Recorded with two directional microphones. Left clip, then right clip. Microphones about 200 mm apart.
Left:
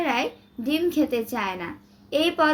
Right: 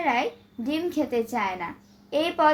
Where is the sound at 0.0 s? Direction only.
50° left (ahead or behind).